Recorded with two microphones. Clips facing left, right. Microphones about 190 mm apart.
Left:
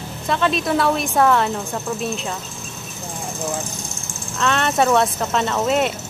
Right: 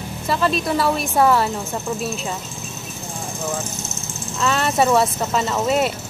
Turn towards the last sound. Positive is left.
turn(degrees=-5)  # may be behind; listen again after turning